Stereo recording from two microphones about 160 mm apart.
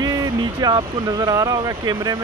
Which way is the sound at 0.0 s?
25° right (ahead or behind).